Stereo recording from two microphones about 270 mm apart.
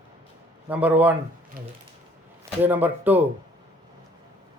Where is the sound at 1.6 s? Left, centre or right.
Right.